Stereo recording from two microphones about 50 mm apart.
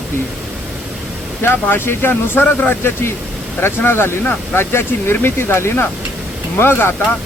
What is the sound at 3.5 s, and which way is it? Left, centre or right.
Speech, left.